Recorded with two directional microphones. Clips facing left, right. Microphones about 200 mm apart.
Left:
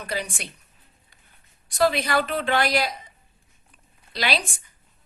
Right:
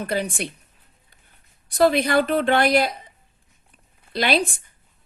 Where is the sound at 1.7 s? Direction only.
55° right (ahead or behind).